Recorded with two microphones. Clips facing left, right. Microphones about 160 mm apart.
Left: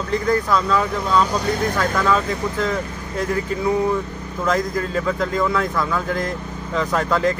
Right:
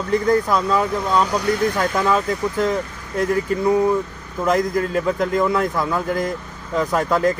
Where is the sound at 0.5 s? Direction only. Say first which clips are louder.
Even; centre (ahead or behind).